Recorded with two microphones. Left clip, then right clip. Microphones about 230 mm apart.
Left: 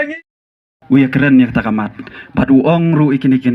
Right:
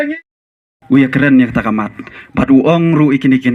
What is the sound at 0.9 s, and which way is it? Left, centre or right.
Speech, left.